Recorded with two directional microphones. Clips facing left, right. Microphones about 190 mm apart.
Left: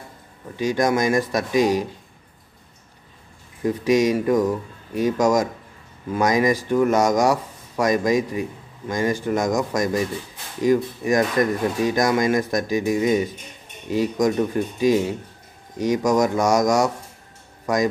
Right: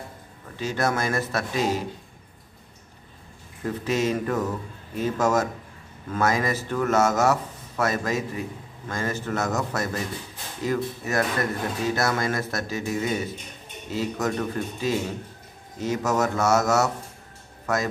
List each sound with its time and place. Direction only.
0.6 s speech: 15° left (ahead or behind)
3.6 s speech: 15° left (ahead or behind)